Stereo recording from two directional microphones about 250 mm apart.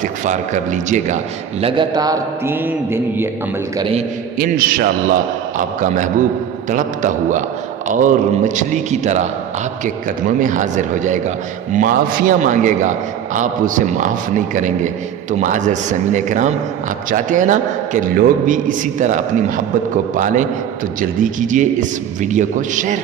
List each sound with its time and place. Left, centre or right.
0.0 s a man's voice: right
1.6 s mantra: centre
3.8 s a man's voice: right
4.4 s a man's voice: right